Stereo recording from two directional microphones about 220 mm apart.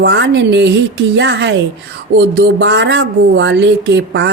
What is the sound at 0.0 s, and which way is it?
Speech, 50° right (ahead or behind).